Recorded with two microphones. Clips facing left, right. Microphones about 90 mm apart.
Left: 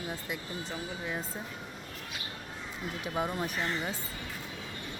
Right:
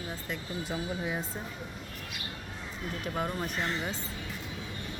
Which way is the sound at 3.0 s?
5° left (ahead or behind).